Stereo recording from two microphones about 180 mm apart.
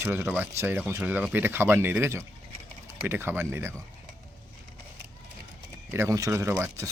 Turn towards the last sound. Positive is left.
turn(degrees=-15)  # may be behind; listen again after turning